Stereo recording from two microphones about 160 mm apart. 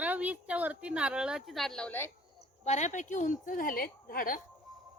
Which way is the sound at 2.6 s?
45° left (ahead or behind).